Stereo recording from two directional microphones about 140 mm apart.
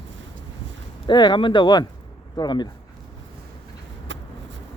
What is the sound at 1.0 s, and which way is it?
Speech, 30° left (ahead or behind).